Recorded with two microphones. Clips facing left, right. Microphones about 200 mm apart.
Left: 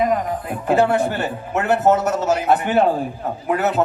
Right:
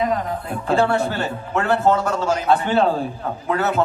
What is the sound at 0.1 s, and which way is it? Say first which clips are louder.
Speech: left 2 dB; 15° left (ahead or behind).